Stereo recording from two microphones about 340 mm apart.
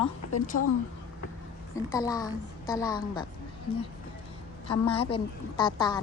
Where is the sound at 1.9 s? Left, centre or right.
Centre.